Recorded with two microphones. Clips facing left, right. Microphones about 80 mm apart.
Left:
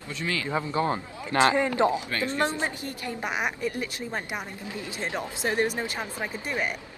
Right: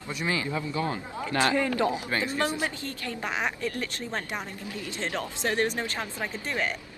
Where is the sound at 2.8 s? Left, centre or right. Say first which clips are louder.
Left 1 dB; centre.